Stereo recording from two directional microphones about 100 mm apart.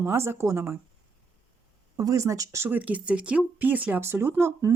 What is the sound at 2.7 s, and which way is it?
Speech, 15° right (ahead or behind).